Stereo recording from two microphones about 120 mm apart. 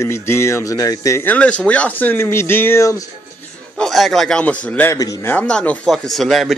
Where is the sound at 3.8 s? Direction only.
Centre (ahead or behind).